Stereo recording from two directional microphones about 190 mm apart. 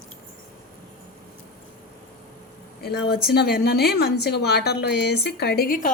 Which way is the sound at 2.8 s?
55° left (ahead or behind).